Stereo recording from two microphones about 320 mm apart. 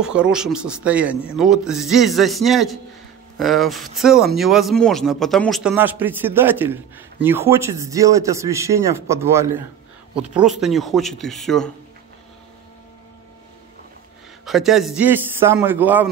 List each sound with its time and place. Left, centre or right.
0.0 s a man's voice: centre
14.4 s speech: centre